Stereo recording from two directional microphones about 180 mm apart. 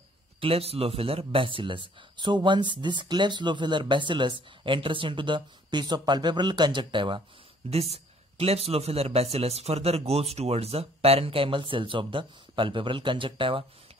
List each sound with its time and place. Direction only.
0.4 s speech: 35° right (ahead or behind)